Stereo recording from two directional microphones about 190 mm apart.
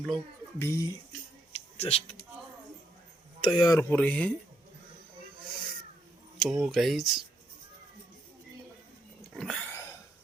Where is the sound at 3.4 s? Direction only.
20° left (ahead or behind).